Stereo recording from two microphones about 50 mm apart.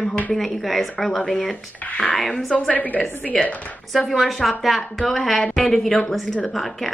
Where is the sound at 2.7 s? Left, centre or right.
Left.